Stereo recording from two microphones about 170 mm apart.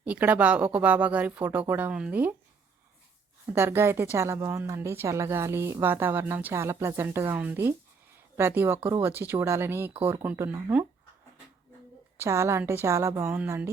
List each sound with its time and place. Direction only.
0.0 s a woman's voice: 10° right (ahead or behind)
3.4 s a woman's voice: 15° right (ahead or behind)
12.2 s a woman's voice: 15° right (ahead or behind)